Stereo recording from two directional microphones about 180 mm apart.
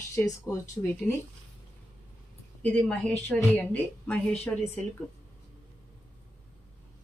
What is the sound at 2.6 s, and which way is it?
A woman's voice, 5° left (ahead or behind).